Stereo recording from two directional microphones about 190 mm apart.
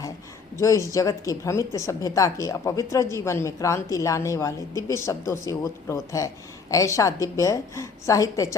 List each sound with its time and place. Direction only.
0.5 s a woman's voice: 15° left (ahead or behind)